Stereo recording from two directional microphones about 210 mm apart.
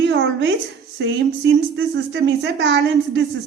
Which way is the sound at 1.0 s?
60° right (ahead or behind).